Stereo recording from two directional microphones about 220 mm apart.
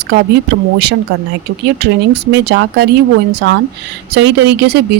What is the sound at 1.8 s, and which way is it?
Speech, 50° right (ahead or behind).